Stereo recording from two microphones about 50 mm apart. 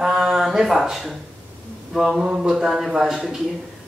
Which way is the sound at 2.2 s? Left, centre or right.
Right.